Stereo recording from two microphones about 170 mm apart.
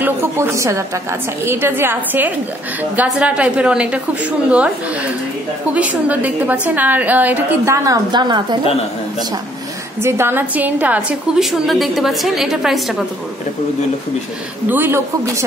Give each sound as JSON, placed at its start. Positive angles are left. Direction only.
{"t": 0.0, "sound": "a woman's voice", "side_deg": -15}
{"t": 5.8, "sound": "a woman's voice", "side_deg": -10}
{"t": 10.0, "sound": "a woman's voice", "side_deg": -15}
{"t": 14.7, "sound": "a woman's voice", "side_deg": -10}